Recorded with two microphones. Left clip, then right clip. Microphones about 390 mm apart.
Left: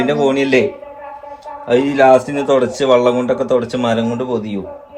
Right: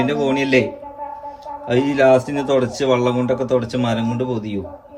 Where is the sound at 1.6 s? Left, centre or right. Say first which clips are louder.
Left 4 dB; centre.